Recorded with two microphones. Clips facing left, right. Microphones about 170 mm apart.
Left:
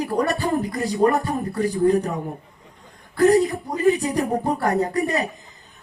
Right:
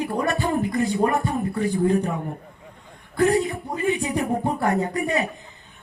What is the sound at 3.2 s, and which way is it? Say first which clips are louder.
Speech: left 4 dB; 35° left (ahead or behind).